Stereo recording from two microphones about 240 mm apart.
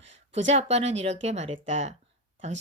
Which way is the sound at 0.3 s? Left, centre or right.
Right.